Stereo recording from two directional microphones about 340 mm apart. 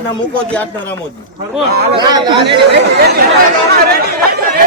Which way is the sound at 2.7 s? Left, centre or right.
Right.